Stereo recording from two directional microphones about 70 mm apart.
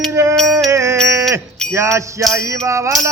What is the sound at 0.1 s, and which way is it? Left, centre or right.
Music, right.